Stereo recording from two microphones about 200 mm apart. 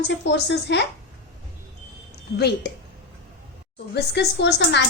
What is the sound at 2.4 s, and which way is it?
Speech, 55° left (ahead or behind).